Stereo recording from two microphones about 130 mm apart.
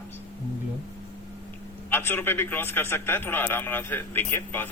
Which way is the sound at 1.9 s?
15° left (ahead or behind).